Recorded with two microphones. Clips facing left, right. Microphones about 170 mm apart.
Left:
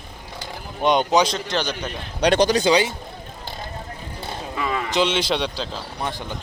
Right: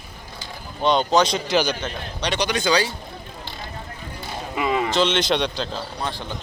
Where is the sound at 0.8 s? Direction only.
15° left (ahead or behind).